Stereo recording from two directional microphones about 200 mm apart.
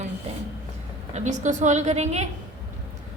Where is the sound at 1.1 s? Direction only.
35° right (ahead or behind).